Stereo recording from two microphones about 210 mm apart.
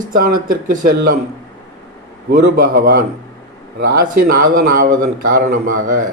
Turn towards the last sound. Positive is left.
turn(degrees=-40)  # may be behind; listen again after turning